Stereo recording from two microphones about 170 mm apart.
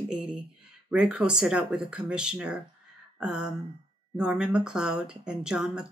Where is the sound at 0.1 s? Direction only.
5° right (ahead or behind).